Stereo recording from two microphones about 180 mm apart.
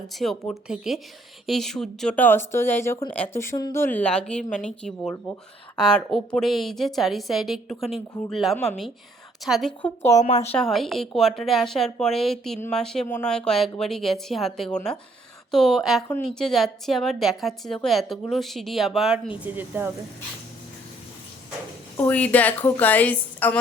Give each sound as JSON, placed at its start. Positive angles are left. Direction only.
{"t": 0.1, "sound": "a woman's voice", "side_deg": 0}
{"t": 10.1, "sound": "speech", "side_deg": 15}
{"t": 10.5, "sound": "a woman's voice", "side_deg": 0}
{"t": 21.9, "sound": "speech", "side_deg": 10}